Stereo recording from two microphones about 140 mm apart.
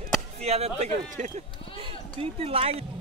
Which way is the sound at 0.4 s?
50° right (ahead or behind).